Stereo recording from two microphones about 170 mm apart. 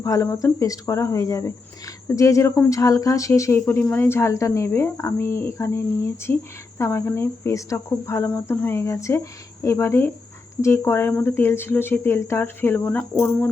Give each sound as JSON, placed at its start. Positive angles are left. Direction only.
{"t": 0.0, "sound": "speech", "side_deg": 15}